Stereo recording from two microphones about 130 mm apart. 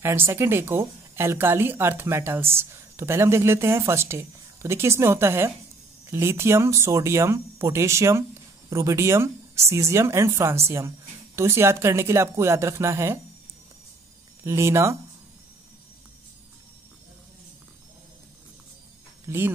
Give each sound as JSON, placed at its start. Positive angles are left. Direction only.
{"t": 0.0, "sound": "a woman's voice", "side_deg": -20}
{"t": 14.4, "sound": "a woman's voice", "side_deg": -20}
{"t": 19.2, "sound": "speech", "side_deg": -20}